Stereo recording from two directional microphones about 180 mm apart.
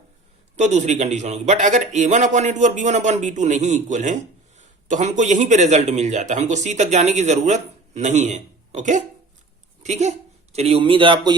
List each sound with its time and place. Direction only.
0.5 s a man's voice: 40° right (ahead or behind)